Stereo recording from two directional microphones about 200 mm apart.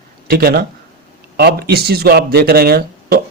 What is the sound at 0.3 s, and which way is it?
Speech, 50° right (ahead or behind).